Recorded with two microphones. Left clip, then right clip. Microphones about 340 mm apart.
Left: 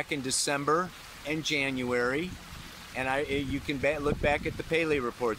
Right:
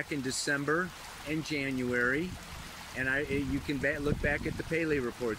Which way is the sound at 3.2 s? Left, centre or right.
Left.